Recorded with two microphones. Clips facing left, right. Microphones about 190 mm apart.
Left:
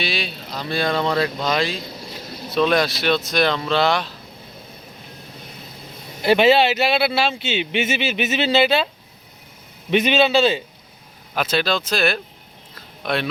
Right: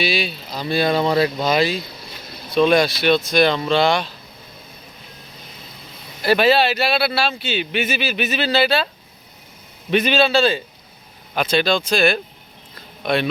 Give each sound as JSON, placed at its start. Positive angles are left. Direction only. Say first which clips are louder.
{"t": 0.0, "sound": "speech", "louder": "right 4 dB", "side_deg": 0}
{"t": 6.2, "sound": "speech", "louder": "left 1 dB", "side_deg": 20}
{"t": 9.9, "sound": "speech", "louder": "even", "side_deg": 20}
{"t": 11.3, "sound": "speech", "louder": "right 3 dB", "side_deg": 5}
{"t": 12.7, "sound": "a sound", "louder": "right 3 dB", "side_deg": 0}